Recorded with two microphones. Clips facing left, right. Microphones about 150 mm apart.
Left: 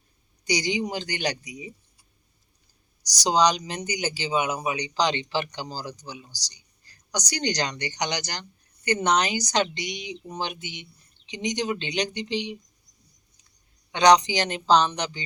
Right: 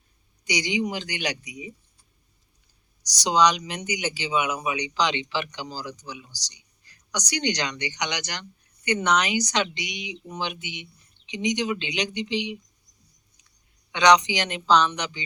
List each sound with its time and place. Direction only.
0.4 s a man's voice: 35° left (ahead or behind)
3.2 s a man's voice: 35° left (ahead or behind)
13.9 s a man's voice: 40° left (ahead or behind)